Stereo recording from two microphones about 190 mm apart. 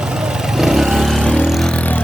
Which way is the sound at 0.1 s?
5° right (ahead or behind).